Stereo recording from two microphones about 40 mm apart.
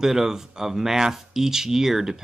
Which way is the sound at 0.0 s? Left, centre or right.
Centre.